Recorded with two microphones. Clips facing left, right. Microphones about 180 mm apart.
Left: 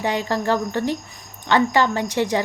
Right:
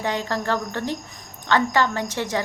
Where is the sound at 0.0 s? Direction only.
15° left (ahead or behind).